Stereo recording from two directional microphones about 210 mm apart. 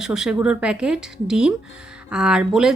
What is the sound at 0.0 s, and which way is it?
A woman's voice, 5° right (ahead or behind).